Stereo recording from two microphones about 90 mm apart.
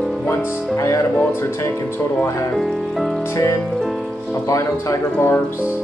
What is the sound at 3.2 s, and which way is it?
Music, 30° left (ahead or behind).